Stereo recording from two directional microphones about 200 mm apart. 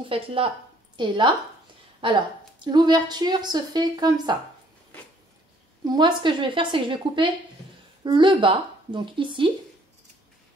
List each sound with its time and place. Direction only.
0.0 s a woman's voice: 25° right (ahead or behind)
5.9 s a woman's voice: 20° right (ahead or behind)